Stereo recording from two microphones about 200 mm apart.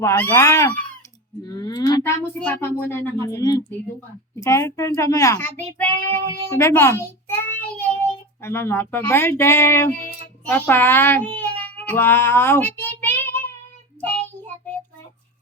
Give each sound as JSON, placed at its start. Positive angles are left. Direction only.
{"t": 0.0, "sound": "a child's voice", "side_deg": 10}
{"t": 8.4, "sound": "a child's voice", "side_deg": 10}
{"t": 11.3, "sound": "child singing", "side_deg": 10}